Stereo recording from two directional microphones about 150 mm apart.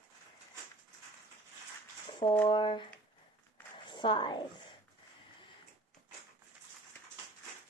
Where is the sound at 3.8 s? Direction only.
30° left (ahead or behind).